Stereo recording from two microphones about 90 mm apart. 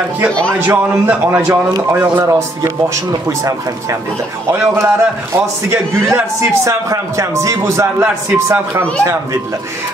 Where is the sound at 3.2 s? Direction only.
35° right (ahead or behind).